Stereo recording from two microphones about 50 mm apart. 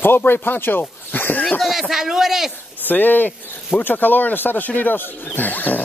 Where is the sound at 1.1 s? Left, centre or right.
Left.